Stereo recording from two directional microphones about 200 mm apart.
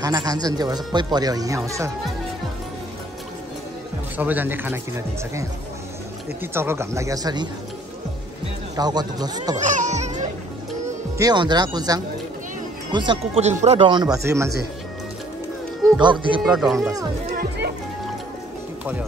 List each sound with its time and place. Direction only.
0.0 s speech: 20° right (ahead or behind)
4.2 s speech: 10° right (ahead or behind)
8.7 s speech: 20° right (ahead or behind)
9.6 s music: 35° right (ahead or behind)
11.1 s speech: 20° right (ahead or behind)
14.1 s speech: 15° right (ahead or behind)
16.0 s speech: 25° right (ahead or behind)
16.4 s speech: centre (ahead or behind)
17.4 s music: 50° right (ahead or behind)